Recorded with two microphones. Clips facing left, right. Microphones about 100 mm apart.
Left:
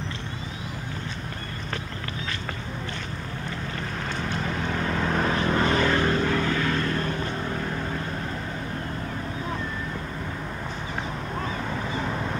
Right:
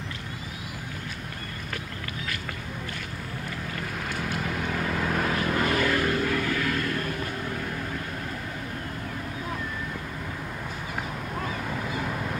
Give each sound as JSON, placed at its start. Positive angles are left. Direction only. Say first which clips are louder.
{"t": 4.2, "sound": "vehicle", "louder": "left 1 dB", "side_deg": -5}
{"t": 5.0, "sound": "vehicle", "louder": "left 3 dB", "side_deg": 30}
{"t": 11.7, "sound": "a sound", "louder": "left 2 dB", "side_deg": -5}
{"t": 12.1, "sound": "vehicle", "louder": "left 2 dB", "side_deg": 25}